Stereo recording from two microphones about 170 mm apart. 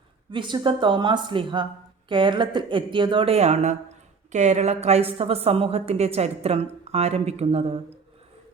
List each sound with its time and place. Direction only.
0.3 s a woman's voice: 25° right (ahead or behind)